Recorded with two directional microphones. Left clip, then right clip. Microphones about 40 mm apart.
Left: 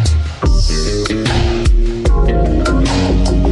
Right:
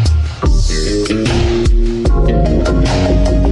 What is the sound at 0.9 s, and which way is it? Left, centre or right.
Music, centre.